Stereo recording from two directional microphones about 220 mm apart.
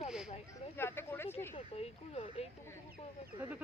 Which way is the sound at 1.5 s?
30° left (ahead or behind).